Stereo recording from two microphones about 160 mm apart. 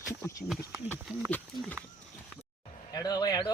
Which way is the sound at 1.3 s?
10° left (ahead or behind).